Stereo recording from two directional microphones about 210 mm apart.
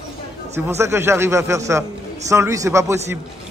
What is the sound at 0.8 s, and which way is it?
A man's voice, 10° right (ahead or behind).